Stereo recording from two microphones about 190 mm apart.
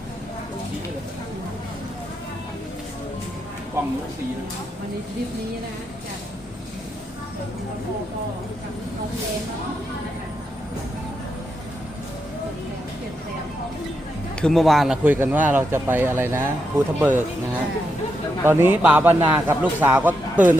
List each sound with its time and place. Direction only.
3.8 s speech: 15° right (ahead or behind)
14.4 s speech: centre (ahead or behind)
18.4 s speech: 10° right (ahead or behind)